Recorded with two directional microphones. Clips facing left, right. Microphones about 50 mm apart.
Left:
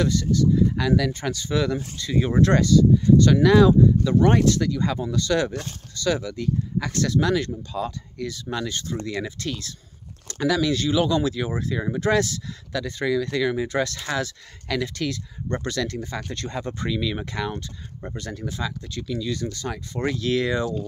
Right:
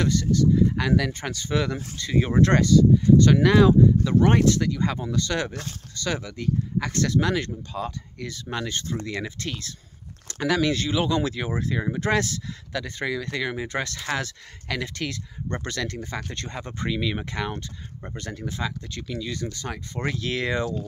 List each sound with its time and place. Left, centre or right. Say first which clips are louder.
0.0 s speech: left 1 dB; right
2.1 s speech: even; right
2.4 s speech: even; right
19.2 s speech: left 3 dB; right